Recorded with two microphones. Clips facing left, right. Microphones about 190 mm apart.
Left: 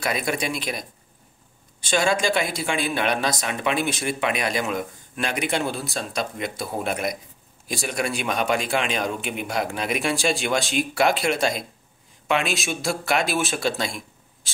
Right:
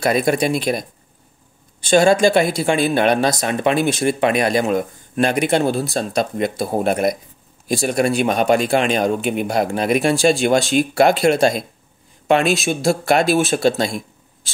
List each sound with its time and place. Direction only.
0.0 s speech: 40° right (ahead or behind)
1.9 s speech: 45° right (ahead or behind)